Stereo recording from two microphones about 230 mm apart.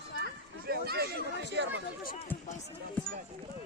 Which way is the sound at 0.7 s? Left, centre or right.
Right.